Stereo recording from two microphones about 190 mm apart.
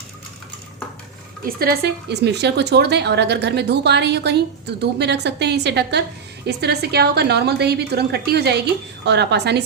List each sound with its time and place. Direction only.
1.5 s a woman's voice: 50° right (ahead or behind)